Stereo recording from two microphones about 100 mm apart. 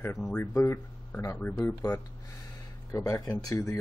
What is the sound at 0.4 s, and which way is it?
Speech, 30° left (ahead or behind).